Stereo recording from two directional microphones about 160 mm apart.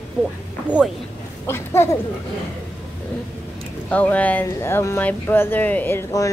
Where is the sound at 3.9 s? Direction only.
10° left (ahead or behind).